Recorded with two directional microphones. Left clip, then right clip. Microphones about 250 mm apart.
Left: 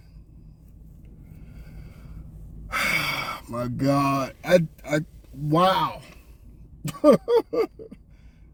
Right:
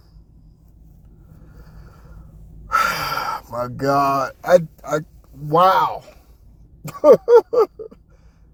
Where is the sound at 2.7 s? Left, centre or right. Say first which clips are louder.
Right 5 dB; centre.